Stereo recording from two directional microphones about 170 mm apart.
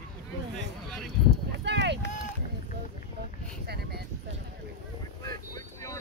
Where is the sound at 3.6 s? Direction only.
70° right (ahead or behind).